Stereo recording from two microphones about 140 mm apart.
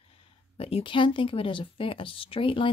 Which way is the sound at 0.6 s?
40° left (ahead or behind).